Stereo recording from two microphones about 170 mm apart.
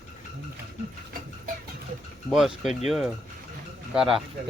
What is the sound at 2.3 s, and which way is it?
Speech, centre (ahead or behind).